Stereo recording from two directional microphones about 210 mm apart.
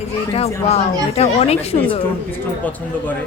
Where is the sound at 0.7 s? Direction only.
30° left (ahead or behind).